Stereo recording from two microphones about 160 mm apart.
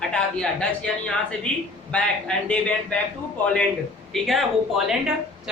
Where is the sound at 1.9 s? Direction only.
5° left (ahead or behind).